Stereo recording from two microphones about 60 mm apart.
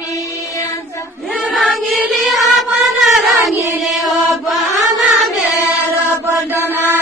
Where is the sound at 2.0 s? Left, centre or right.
Centre.